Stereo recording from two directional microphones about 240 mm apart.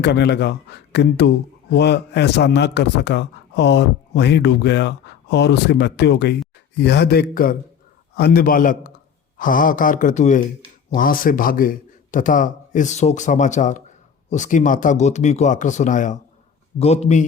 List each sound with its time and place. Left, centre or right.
0.0 s a man's voice: left